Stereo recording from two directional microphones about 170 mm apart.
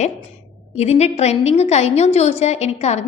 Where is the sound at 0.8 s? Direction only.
40° left (ahead or behind).